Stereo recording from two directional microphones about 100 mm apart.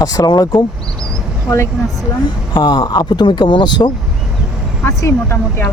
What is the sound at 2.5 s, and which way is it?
Speech, 50° left (ahead or behind).